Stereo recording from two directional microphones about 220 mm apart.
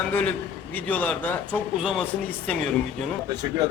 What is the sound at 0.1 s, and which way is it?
A man's voice, 5° left (ahead or behind).